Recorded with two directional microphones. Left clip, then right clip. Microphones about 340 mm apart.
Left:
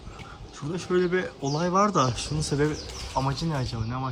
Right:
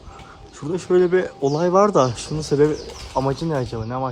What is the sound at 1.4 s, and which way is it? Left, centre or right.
Speech, right.